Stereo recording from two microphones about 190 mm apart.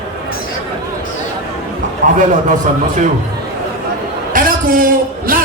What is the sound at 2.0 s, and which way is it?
Speech, 40° right (ahead or behind).